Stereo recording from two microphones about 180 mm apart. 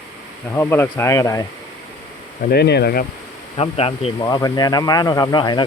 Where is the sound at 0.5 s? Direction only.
10° left (ahead or behind).